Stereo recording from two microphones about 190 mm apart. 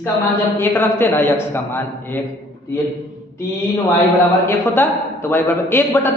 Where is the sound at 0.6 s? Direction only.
10° left (ahead or behind).